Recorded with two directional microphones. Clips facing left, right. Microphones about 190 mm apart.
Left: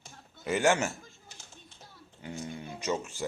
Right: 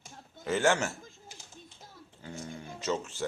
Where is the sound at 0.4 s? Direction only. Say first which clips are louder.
Left 1 dB; 15° left (ahead or behind).